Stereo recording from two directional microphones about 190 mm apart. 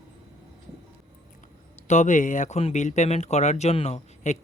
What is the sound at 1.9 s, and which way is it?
Speech, 40° left (ahead or behind).